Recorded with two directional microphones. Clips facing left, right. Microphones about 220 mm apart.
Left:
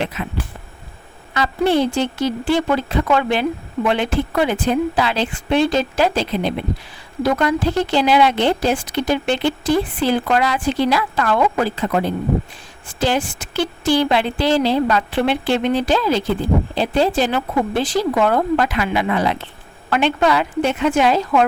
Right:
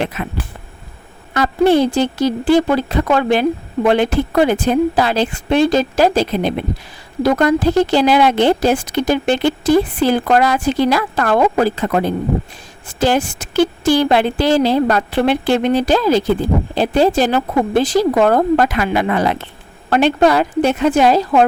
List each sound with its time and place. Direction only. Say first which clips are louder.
0.0 s speech: right 3 dB; 50° right (ahead or behind)
1.3 s speech: right 5 dB; 45° right (ahead or behind)